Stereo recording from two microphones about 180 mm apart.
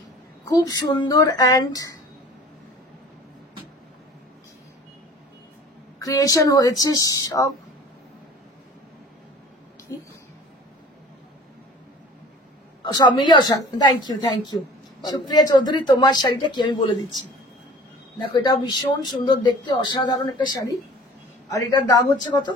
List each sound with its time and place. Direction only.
0.5 s speech: 20° left (ahead or behind)
5.9 s speech: 20° left (ahead or behind)
12.8 s speech: 25° left (ahead or behind)
18.2 s speech: 25° left (ahead or behind)